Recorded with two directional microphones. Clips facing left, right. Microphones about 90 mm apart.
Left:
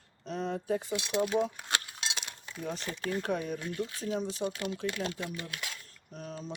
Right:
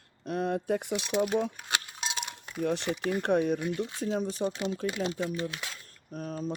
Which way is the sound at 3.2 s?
60° right (ahead or behind).